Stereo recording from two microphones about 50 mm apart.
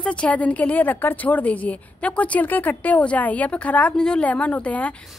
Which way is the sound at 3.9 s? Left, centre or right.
Centre.